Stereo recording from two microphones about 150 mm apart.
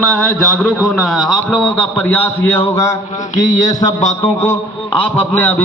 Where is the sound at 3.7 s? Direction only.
25° left (ahead or behind).